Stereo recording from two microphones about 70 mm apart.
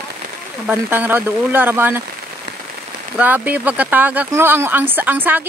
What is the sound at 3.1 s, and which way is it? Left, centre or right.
A woman's voice, right.